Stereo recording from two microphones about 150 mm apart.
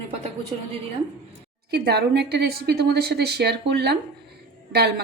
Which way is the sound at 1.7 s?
90° right.